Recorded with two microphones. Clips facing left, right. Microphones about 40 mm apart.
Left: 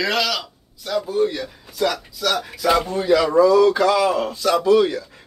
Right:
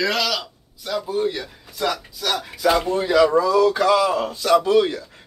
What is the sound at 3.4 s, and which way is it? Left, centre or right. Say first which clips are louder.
Speech: left 4 dB; centre.